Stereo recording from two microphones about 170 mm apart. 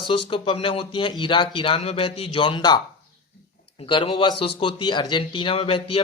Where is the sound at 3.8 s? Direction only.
30° left (ahead or behind).